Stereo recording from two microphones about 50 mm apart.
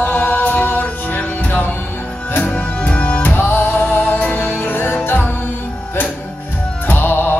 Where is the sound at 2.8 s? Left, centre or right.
Left.